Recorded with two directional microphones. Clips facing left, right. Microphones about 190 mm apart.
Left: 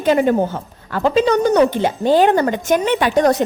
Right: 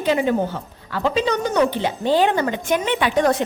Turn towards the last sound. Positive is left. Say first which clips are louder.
# left 4 dB
turn(degrees=40)  # may be behind; listen again after turning